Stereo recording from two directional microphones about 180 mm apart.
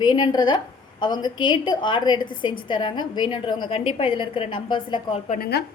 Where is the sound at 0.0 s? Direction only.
25° left (ahead or behind).